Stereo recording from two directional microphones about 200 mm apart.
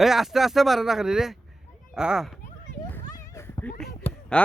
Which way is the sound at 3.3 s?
15° left (ahead or behind).